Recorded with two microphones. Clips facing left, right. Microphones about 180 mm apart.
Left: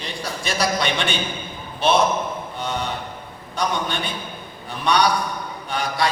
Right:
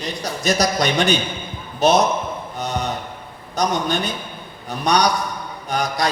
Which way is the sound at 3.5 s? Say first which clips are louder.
Right 4 dB; 40° right (ahead or behind).